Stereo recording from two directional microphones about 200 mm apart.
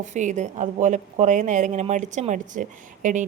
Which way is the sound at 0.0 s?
40° right (ahead or behind).